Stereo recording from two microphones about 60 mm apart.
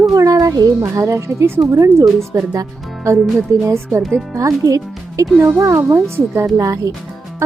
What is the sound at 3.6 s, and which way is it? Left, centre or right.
Speech, right.